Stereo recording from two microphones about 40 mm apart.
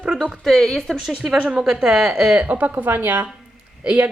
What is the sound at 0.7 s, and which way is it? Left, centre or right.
Speech, centre.